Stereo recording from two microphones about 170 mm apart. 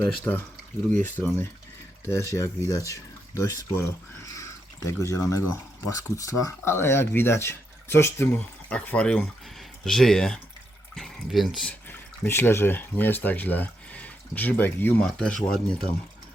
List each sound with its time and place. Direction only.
0.0 s speech: 10° left (ahead or behind)